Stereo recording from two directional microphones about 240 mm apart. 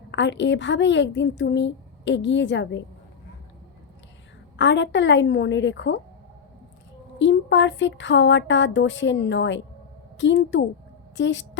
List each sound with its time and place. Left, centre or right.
0.1 s a woman's voice: left
4.5 s a woman's voice: left
7.2 s a woman's voice: left